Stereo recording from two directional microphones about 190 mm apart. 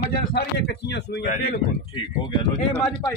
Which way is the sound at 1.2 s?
40° left (ahead or behind).